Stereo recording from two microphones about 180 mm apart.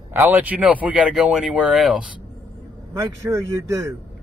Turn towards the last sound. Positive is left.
turn(degrees=-15)  # may be behind; listen again after turning